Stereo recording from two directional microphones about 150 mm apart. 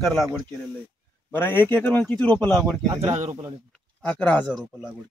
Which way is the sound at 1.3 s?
15° left (ahead or behind).